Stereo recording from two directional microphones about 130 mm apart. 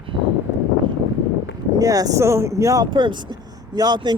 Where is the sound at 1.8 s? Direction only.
25° right (ahead or behind).